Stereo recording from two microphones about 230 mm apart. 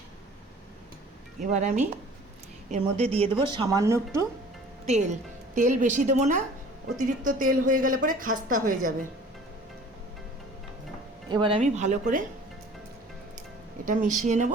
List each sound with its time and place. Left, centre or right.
1.4 s a woman's voice: right; by 4.3 s centre
4.9 s a woman's voice: right
11.3 s a woman's voice: right
13.8 s a woman's voice: right